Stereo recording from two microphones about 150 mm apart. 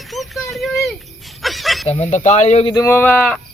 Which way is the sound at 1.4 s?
Centre (ahead or behind).